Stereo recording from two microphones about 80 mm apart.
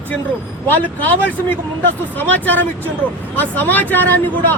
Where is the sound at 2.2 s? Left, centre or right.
Left.